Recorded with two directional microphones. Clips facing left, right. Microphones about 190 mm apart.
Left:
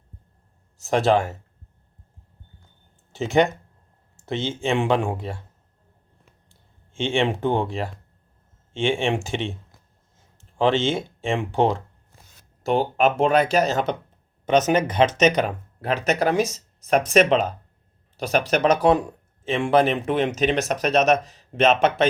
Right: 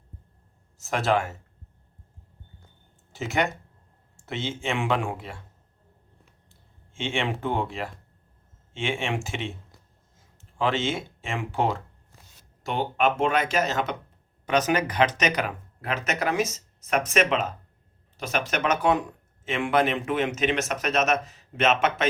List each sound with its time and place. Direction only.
0.9 s speech: 30° left (ahead or behind)
3.1 s speech: 30° left (ahead or behind)
6.9 s speech: 30° left (ahead or behind)
14.4 s speech: 25° left (ahead or behind)